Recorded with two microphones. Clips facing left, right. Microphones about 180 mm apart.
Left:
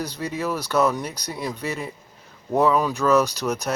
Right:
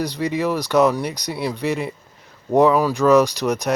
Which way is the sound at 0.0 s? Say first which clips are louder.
Right 6 dB; 15° right (ahead or behind).